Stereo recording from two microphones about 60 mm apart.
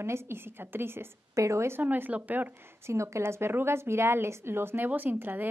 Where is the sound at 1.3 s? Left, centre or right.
Right.